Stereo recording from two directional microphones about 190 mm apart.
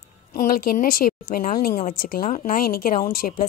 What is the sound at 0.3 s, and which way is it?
A woman's voice, 50° left (ahead or behind).